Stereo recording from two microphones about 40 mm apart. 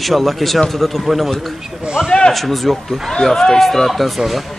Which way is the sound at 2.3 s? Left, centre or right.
Centre.